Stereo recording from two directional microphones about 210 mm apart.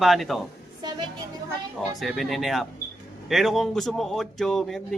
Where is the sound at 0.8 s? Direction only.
20° right (ahead or behind).